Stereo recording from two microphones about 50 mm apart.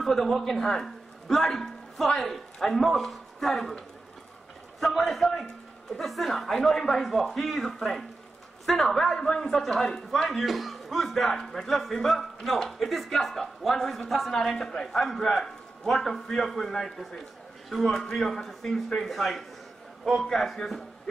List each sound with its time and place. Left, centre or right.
0.0 s a man's voice: centre
4.7 s a sound: centre
5.1 s a man's voice: centre
10.4 s a man's voice: centre